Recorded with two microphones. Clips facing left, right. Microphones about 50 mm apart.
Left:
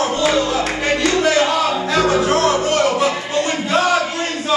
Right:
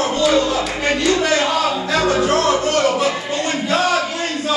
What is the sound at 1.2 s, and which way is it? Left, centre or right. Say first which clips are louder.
Music: left 2 dB; centre.